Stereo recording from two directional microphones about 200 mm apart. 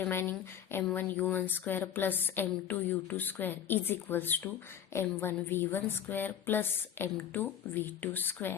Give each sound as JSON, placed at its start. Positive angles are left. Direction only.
{"t": 0.0, "sound": "speech", "side_deg": 10}